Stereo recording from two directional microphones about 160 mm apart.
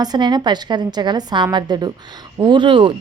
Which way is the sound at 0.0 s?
25° right (ahead or behind).